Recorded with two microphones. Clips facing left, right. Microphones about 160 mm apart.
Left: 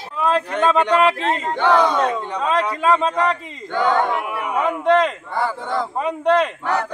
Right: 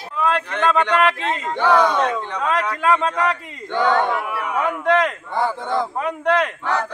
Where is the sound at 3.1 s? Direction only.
5° left (ahead or behind).